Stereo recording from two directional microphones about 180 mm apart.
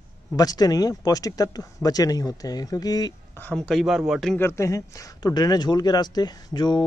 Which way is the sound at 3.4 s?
5° left (ahead or behind).